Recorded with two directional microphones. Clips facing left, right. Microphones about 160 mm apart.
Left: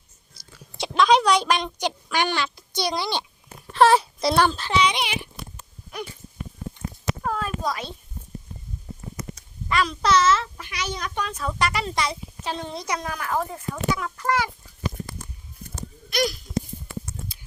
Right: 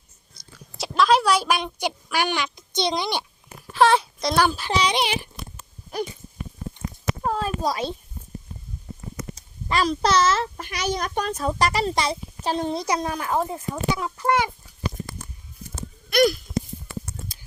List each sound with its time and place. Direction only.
0.8 s a woman's voice: centre (ahead or behind)
3.7 s speech: centre (ahead or behind)
4.4 s a child's voice: 10° right (ahead or behind)
4.7 s a child's voice: 35° right (ahead or behind)
7.3 s a child's voice: 30° right (ahead or behind)
9.3 s a child's voice: 35° right (ahead or behind)
16.0 s a sound: 55° right (ahead or behind)